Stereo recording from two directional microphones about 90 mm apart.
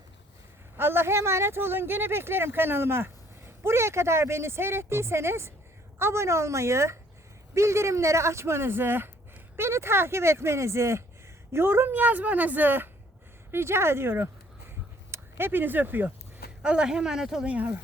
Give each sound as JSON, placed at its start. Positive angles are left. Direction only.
{"t": 0.8, "sound": "speech", "side_deg": -25}
{"t": 16.6, "sound": "speech", "side_deg": -10}